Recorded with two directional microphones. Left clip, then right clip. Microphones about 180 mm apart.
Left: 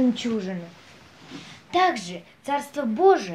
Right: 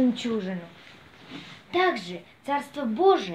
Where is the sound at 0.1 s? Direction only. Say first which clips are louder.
Left 1 dB; 15° left (ahead or behind).